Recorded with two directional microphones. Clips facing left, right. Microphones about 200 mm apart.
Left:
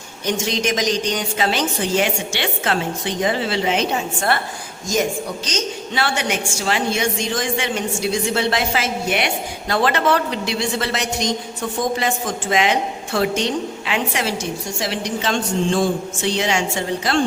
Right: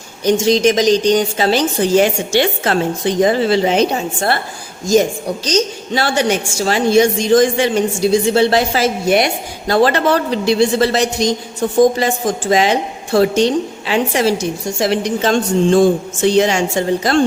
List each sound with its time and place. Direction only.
0.3 s a woman's voice: 35° right (ahead or behind)
5.5 s a woman's voice: 35° right (ahead or behind)